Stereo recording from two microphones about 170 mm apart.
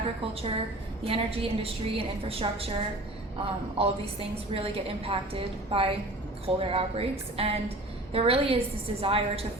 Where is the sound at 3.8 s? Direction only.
35° right (ahead or behind).